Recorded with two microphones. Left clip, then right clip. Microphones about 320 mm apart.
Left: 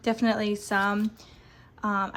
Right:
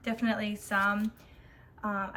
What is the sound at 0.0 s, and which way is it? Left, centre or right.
Speech, centre.